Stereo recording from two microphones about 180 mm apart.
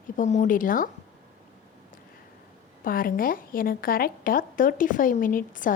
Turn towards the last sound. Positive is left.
turn(degrees=50)  # may be behind; listen again after turning